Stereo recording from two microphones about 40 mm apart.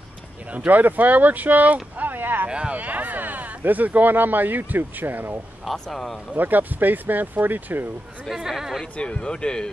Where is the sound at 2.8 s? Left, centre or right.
Right.